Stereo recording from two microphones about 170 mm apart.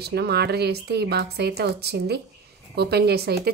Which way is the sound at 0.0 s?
70° right (ahead or behind).